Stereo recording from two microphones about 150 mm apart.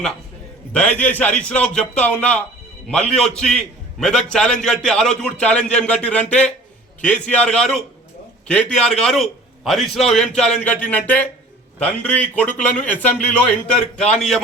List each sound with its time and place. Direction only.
0.7 s a man's voice: 10° left (ahead or behind)